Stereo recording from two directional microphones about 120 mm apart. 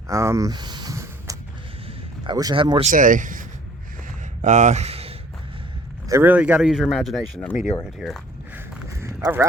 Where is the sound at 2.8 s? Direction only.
90° right.